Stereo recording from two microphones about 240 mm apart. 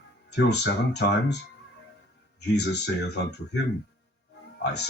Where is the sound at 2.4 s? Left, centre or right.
Left.